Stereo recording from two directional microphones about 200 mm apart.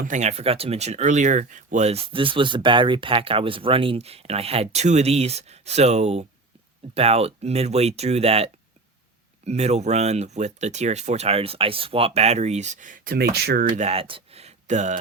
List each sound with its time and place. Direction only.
0.0 s speech: 35° right (ahead or behind)
9.5 s speech: 35° right (ahead or behind); by 13.7 s 55° right (ahead or behind)
13.7 s speech: 30° right (ahead or behind)